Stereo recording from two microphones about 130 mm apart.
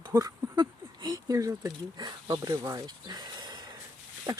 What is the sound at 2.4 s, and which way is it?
Speech, 20° right (ahead or behind).